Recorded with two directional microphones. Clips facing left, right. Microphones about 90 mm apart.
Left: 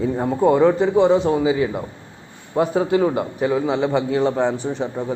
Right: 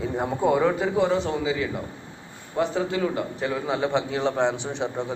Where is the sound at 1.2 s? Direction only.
30° left (ahead or behind).